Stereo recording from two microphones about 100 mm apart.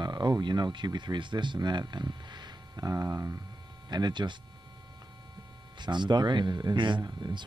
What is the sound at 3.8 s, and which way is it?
Speech, 45° right (ahead or behind).